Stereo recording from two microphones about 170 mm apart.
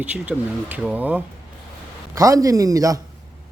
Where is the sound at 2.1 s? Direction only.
20° right (ahead or behind).